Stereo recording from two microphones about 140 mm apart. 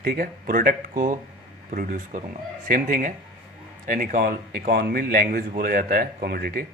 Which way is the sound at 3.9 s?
90° right.